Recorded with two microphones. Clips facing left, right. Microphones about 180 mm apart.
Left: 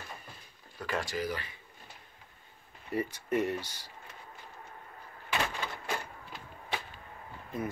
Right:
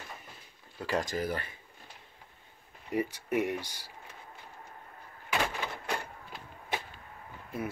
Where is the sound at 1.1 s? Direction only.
50° right (ahead or behind).